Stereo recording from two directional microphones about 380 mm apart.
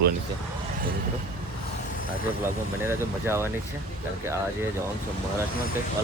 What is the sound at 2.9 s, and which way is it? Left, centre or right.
Speech, centre.